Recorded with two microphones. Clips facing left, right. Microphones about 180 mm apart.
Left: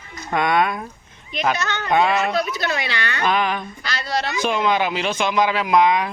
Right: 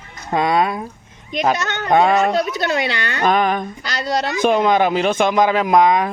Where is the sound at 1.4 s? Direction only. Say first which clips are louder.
Right 3 dB; 45° right (ahead or behind).